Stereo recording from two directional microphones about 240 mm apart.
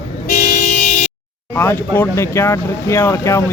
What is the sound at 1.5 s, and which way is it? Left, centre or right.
Speech, centre.